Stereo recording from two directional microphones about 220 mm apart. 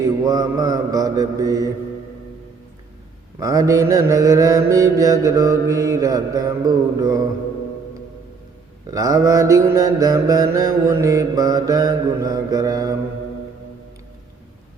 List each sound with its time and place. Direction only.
0.0 s mantra: 15° right (ahead or behind)
3.4 s mantra: 15° right (ahead or behind)
8.9 s mantra: 15° right (ahead or behind)